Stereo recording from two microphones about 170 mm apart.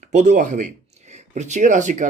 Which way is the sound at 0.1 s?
45° right (ahead or behind).